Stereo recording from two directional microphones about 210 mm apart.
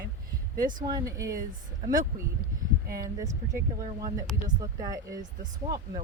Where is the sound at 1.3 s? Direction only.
40° right (ahead or behind).